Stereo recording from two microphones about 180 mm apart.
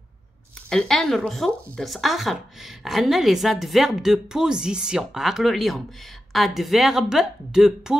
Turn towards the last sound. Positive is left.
turn(degrees=-5)  # may be behind; listen again after turning